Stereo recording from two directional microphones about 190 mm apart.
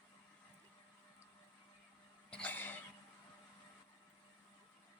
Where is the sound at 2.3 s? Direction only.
10° left (ahead or behind).